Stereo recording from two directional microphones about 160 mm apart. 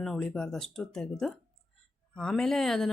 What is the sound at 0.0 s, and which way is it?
Speech, 5° left (ahead or behind).